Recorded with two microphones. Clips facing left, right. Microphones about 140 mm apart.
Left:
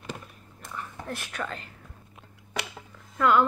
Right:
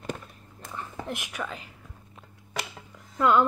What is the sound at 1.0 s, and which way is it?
Speech, 15° right (ahead or behind).